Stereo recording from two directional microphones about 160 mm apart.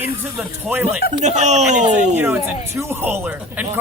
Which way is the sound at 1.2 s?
45° right (ahead or behind).